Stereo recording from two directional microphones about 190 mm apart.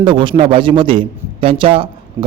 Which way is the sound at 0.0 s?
25° right (ahead or behind).